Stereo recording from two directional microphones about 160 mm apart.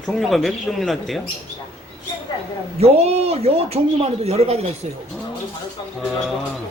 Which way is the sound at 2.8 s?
40° right (ahead or behind).